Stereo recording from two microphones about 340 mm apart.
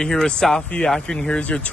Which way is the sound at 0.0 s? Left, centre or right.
Centre.